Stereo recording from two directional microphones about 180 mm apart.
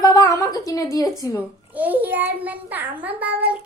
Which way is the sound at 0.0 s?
20° left (ahead or behind).